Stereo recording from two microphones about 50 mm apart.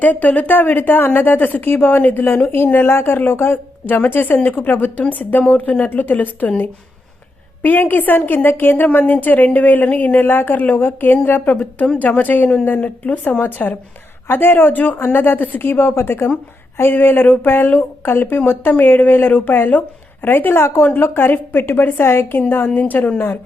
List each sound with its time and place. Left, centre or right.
0.0 s a woman's voice: left
7.6 s a woman's voice: left